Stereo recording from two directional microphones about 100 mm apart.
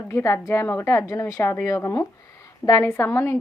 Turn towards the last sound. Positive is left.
turn(degrees=25)  # may be behind; listen again after turning